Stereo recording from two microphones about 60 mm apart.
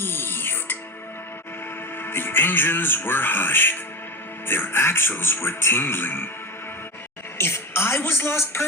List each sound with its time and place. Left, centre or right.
0.0 s music: left
2.0 s speech: left
7.3 s speech: left